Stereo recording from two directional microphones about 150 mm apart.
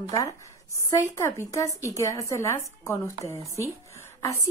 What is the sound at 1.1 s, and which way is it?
Speech, 20° left (ahead or behind).